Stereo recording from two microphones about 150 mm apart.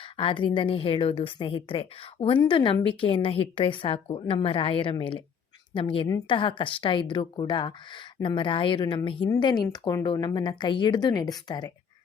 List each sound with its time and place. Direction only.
0.2 s a woman's voice: 35° left (ahead or behind)